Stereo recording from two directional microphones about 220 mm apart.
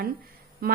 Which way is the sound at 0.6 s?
40° right (ahead or behind).